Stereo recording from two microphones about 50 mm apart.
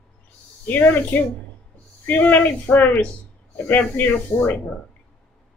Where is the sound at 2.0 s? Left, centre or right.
Left.